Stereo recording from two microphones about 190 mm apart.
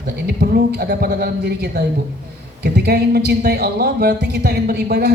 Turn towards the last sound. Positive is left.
turn(degrees=-60)  # may be behind; listen again after turning